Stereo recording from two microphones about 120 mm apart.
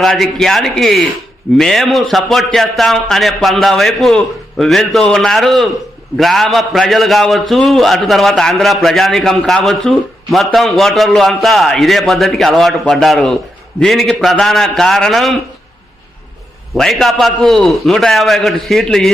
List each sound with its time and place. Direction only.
0.0 s a man's voice: centre (ahead or behind)
9.4 s a man's voice: 10° left (ahead or behind)
16.7 s a man's voice: 5° left (ahead or behind)